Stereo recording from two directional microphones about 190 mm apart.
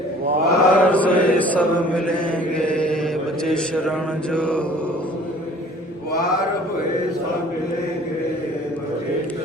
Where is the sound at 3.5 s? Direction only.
5° left (ahead or behind).